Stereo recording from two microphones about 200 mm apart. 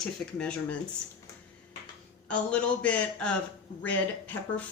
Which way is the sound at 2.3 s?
5° left (ahead or behind).